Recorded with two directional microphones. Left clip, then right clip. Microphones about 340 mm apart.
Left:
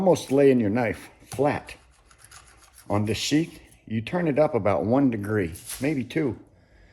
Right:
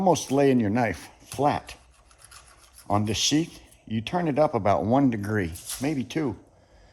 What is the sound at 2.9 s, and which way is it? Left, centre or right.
Speech, right.